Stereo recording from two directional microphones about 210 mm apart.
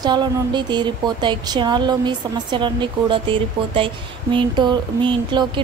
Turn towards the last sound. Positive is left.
turn(degrees=-20)  # may be behind; listen again after turning